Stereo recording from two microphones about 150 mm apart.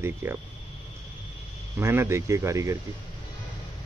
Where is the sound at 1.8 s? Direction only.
20° right (ahead or behind).